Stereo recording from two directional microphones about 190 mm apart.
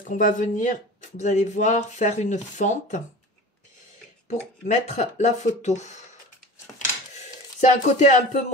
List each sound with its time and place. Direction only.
0.0 s speech: 45° left (ahead or behind)
4.3 s speech: 35° left (ahead or behind)
7.6 s speech: 40° left (ahead or behind)